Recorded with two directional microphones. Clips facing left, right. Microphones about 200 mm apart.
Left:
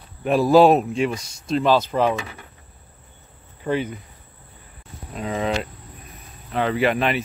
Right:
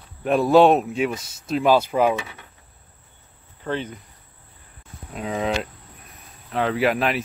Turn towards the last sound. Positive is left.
turn(degrees=0)  # may be behind; listen again after turning